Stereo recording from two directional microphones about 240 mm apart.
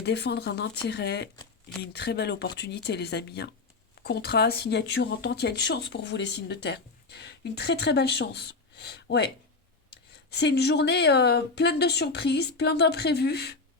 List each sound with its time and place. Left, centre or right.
0.0 s speech: left